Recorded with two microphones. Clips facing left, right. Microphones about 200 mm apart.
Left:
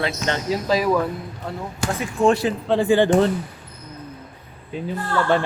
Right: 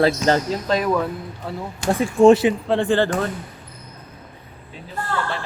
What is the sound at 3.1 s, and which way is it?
Speech, 30° left (ahead or behind).